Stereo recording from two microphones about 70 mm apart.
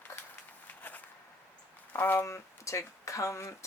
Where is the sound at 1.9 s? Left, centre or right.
Left.